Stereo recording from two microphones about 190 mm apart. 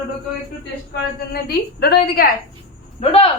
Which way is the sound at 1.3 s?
55° left (ahead or behind).